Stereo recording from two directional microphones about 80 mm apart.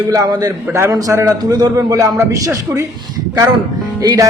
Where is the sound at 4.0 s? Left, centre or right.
Right.